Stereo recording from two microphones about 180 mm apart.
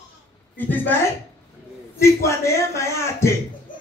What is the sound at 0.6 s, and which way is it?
Speech, 10° left (ahead or behind).